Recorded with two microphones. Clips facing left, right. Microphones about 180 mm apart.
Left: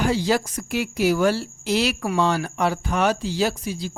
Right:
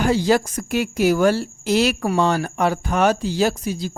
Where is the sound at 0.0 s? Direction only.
50° right (ahead or behind).